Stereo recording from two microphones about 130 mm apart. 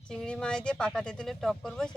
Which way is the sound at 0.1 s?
5° left (ahead or behind).